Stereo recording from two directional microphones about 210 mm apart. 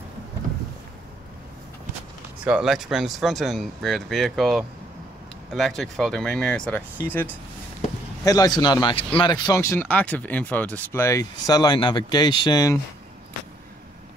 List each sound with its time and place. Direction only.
2.4 s speech: 5° right (ahead or behind); by 12.7 s 20° left (ahead or behind)